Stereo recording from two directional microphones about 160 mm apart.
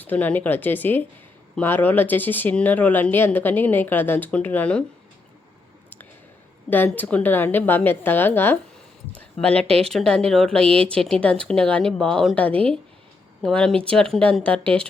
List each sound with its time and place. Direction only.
0.0 s speech: 10° left (ahead or behind)
6.7 s speech: 10° left (ahead or behind)
9.6 s speech: 40° right (ahead or behind)
9.9 s speech: 5° left (ahead or behind)